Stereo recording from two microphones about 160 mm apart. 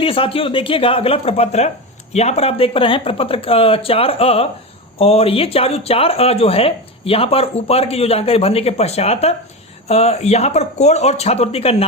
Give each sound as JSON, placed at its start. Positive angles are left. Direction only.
{"t": 0.0, "sound": "speech", "side_deg": 35}